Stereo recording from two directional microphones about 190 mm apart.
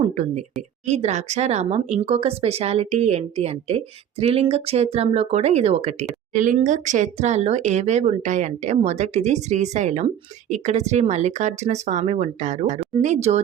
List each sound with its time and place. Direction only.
0.0 s speech: 35° right (ahead or behind)